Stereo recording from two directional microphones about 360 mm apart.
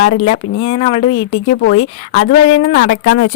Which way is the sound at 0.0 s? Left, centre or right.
Left.